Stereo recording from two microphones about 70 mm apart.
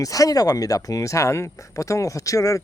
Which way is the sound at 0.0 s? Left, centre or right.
Left.